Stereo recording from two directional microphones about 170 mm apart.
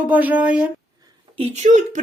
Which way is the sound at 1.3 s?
40° right (ahead or behind).